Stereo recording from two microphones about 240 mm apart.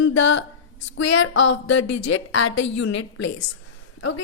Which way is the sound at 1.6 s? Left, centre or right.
Left.